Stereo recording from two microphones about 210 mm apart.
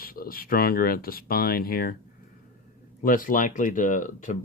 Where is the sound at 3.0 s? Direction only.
40° left (ahead or behind).